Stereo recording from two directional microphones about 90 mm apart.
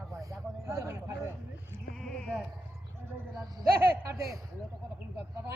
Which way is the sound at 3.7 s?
25° right (ahead or behind).